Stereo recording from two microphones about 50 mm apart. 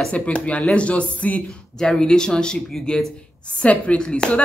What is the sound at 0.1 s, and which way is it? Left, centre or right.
Speech, left.